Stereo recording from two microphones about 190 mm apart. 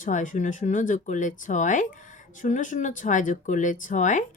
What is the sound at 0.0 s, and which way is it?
Speech, 45° left (ahead or behind).